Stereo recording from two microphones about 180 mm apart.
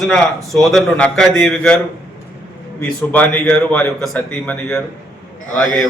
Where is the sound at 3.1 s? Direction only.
10° left (ahead or behind).